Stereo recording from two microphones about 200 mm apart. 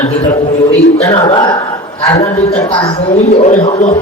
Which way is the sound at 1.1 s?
25° left (ahead or behind).